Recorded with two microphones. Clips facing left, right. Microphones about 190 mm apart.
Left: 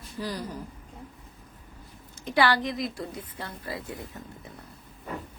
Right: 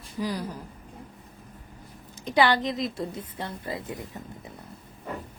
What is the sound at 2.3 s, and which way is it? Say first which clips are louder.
A woman's voice: right 2 dB; 20° right (ahead or behind).